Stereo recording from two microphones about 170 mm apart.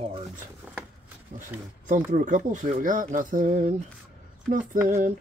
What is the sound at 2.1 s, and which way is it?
Speech, 50° right (ahead or behind).